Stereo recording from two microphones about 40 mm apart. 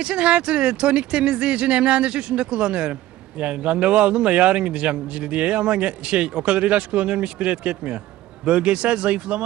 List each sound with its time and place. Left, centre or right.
0.0 s speech: right